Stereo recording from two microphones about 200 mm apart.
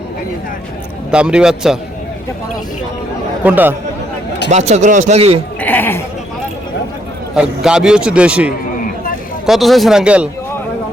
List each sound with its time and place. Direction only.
1.1 s a man's voice: 5° right (ahead or behind)
3.4 s speech: 10° right (ahead or behind)
4.5 s speech: 35° right (ahead or behind)
5.5 s sheep: 10° left (ahead or behind)
7.3 s a man's voice: 5° right (ahead or behind)